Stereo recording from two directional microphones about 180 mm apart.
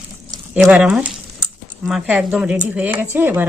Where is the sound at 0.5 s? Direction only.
5° right (ahead or behind).